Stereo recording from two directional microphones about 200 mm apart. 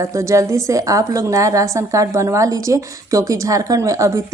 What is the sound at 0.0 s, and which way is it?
A woman's voice, 15° right (ahead or behind).